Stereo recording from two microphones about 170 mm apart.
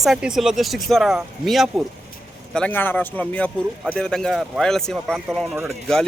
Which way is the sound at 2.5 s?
10° left (ahead or behind).